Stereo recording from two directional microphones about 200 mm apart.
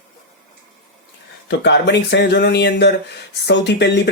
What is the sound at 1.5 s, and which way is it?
Speech, 60° left (ahead or behind).